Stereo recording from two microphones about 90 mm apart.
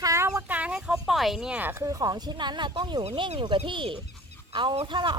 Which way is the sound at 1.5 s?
20° right (ahead or behind).